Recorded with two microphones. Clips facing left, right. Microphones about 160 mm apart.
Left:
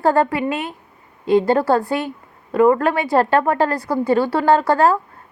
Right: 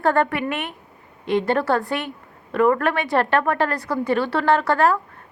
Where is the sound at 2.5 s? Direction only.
20° left (ahead or behind).